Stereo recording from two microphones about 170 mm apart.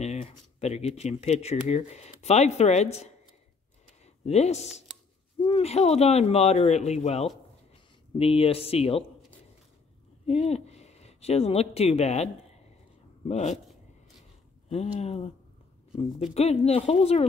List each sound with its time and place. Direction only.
0.0 s speech: 40° left (ahead or behind)
4.0 s a sound: 40° left (ahead or behind)
5.4 s speech: 35° left (ahead or behind)
10.2 s speech: 40° left (ahead or behind)
13.3 s speech: 40° left (ahead or behind)
14.7 s speech: 40° left (ahead or behind)
16.3 s speech: 40° left (ahead or behind)